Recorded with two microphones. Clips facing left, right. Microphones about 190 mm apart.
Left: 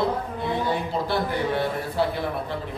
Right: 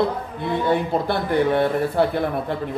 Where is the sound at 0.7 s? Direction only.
55° right (ahead or behind).